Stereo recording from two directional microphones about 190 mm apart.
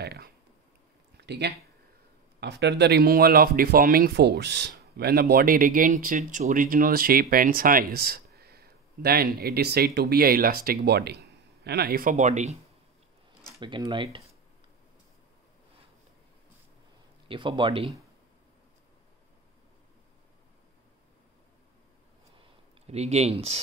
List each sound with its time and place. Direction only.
0.0 s a sound: 60° right (ahead or behind)
2.4 s speech: 60° right (ahead or behind); by 12.5 s 40° right (ahead or behind)
13.6 s speech: 25° right (ahead or behind)
17.3 s speech: 25° right (ahead or behind)
22.8 s speech: 35° right (ahead or behind)